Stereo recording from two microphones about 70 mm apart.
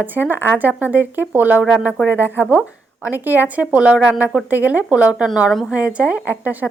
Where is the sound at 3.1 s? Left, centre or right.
Right.